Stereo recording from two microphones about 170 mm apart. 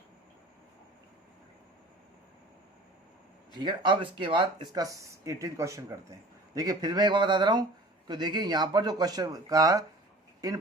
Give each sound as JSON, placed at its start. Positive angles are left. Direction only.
{"t": 3.5, "sound": "speech", "side_deg": -25}